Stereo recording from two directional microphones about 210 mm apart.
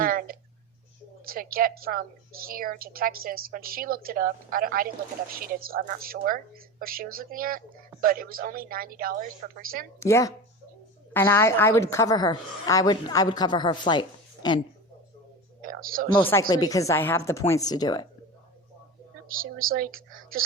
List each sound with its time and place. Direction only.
0.0 s a sound: 45° right (ahead or behind)
1.3 s a woman's voice: 45° right (ahead or behind)
10.0 s a woman's voice: 15° left (ahead or behind)
15.6 s speech: 40° right (ahead or behind)
16.2 s a woman's voice: 15° left (ahead or behind)
19.3 s a woman's voice: 40° right (ahead or behind)